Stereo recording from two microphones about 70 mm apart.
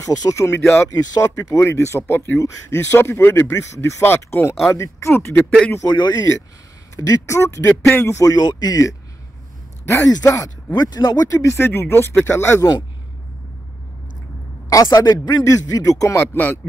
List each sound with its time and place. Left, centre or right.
0.0 s speech: left
0.8 s speech: left
1.6 s speech: left
4.0 s speech: left
5.9 s speech: left
7.0 s speech: left
8.2 s speech: left
10.0 s speech: left
11.1 s speech: left
14.7 s speech: left